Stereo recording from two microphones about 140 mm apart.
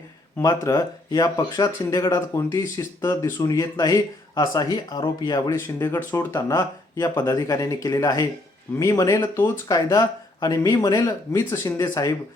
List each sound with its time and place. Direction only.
0.4 s speech: 25° left (ahead or behind)